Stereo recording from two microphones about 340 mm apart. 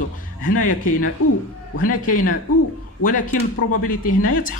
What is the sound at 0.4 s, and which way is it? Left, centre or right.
Speech, left.